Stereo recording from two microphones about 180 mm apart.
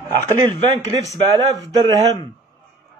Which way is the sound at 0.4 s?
25° right (ahead or behind).